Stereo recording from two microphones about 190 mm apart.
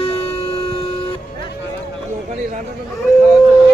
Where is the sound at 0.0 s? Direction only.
30° left (ahead or behind).